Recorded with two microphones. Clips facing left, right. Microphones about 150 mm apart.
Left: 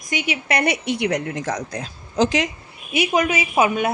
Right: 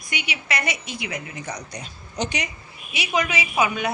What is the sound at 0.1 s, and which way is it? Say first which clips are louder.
A woman's voice: left 6 dB; 45° left (ahead or behind).